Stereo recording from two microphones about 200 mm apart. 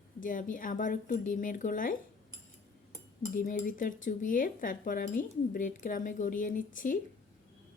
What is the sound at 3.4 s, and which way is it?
Speech, 40° left (ahead or behind).